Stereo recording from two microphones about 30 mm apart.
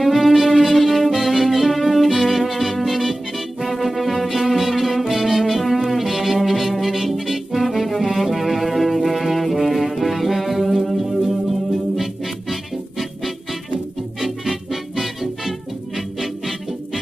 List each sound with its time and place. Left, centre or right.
0.0 s music: centre
7.9 s brass instrument: centre
14.2 s music: centre